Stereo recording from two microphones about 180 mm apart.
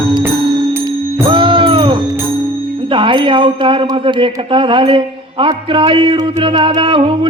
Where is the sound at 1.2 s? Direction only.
30° right (ahead or behind).